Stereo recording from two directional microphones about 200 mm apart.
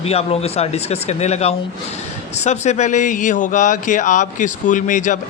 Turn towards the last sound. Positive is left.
turn(degrees=40)  # may be behind; listen again after turning